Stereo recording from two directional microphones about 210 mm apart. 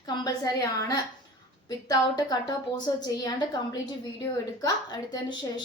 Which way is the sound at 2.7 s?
20° left (ahead or behind).